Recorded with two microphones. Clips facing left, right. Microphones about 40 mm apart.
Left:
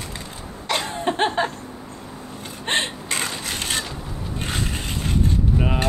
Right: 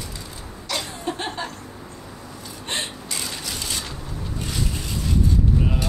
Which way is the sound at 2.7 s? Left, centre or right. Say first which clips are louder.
Left 6 dB; left.